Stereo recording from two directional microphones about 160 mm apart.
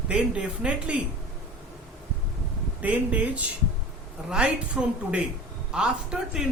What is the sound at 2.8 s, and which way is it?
A woman's voice, 10° right (ahead or behind).